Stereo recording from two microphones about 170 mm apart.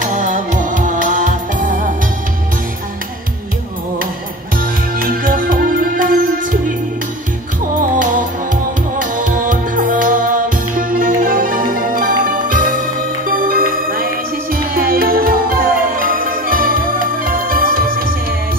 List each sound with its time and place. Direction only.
0.0 s music: 45° right (ahead or behind)
4.6 s music: 55° right (ahead or behind)
8.0 s music: 50° right (ahead or behind)